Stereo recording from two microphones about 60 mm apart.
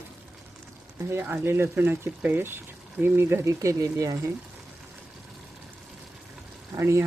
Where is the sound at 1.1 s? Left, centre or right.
Right.